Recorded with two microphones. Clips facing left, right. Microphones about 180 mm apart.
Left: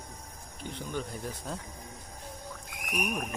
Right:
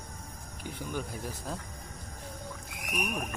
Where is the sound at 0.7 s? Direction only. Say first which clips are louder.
Even; 5° right (ahead or behind).